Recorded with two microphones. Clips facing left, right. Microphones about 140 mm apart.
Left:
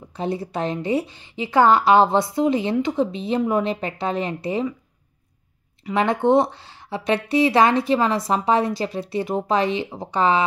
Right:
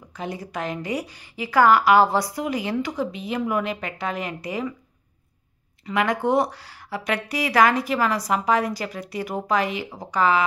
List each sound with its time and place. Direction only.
0.1 s a woman's voice: 30° left (ahead or behind)
5.9 s a woman's voice: 25° left (ahead or behind)